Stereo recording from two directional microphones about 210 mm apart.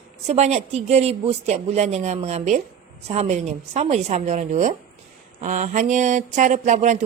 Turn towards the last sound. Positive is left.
turn(degrees=-35)  # may be behind; listen again after turning